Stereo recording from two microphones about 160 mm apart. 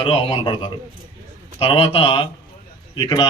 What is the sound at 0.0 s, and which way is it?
Speech, 35° left (ahead or behind).